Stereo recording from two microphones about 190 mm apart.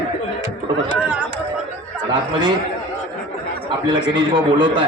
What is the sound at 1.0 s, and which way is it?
Speech, 5° right (ahead or behind).